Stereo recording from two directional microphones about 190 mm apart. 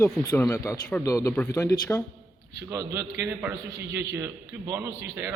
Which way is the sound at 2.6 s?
15° right (ahead or behind).